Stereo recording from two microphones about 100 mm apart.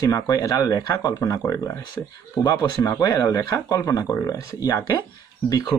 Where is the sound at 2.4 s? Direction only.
40° left (ahead or behind).